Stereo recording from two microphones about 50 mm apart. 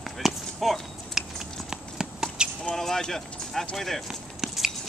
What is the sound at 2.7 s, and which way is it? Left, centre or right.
Speech, centre.